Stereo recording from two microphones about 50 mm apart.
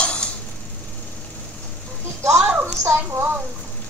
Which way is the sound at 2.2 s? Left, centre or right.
Right.